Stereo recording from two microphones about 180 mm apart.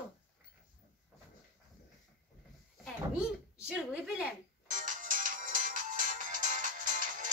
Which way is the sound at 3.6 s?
5° right (ahead or behind).